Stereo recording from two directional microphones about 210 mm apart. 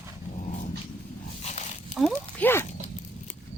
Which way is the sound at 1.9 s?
5° left (ahead or behind).